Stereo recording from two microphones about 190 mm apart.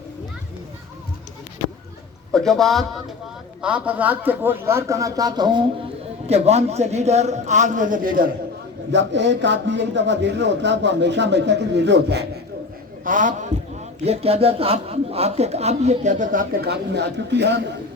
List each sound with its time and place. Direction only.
2.3 s a man's voice: centre (ahead or behind); by 5.6 s 20° right (ahead or behind)
6.2 s speech: 35° right (ahead or behind)
8.9 s speech: 70° right (ahead or behind)
13.1 s a man's voice: 45° right (ahead or behind)
14.0 s speech: 30° right (ahead or behind); by 17.6 s 65° right (ahead or behind)